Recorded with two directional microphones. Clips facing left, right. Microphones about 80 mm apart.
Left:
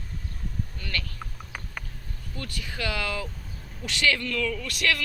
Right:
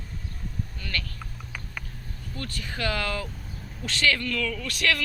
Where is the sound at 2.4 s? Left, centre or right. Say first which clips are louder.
Right 1 dB; centre.